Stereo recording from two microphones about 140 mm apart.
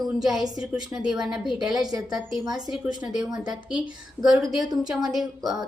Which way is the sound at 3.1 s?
30° right (ahead or behind).